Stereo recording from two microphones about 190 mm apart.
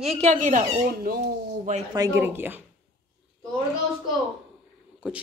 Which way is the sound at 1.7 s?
40° right (ahead or behind).